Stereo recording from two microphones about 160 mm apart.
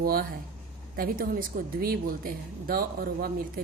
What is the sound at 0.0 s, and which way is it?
Speech, 65° right (ahead or behind).